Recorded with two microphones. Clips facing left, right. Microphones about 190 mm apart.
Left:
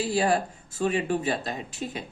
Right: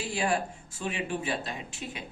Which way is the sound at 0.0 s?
35° left (ahead or behind).